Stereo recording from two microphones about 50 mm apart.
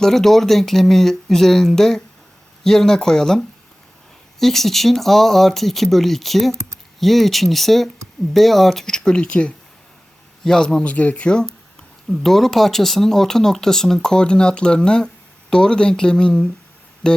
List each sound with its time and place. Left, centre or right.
0.0 s speech: centre
10.4 s speech: centre
10.8 s speech: left
12.1 s speech: centre